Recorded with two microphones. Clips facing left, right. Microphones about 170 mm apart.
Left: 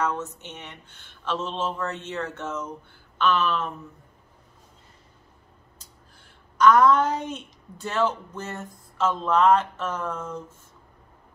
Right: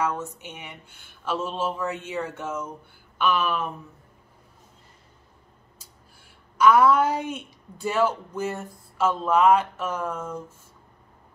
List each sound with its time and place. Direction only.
0.0 s a woman's voice: 10° right (ahead or behind)
6.6 s a woman's voice: 10° right (ahead or behind)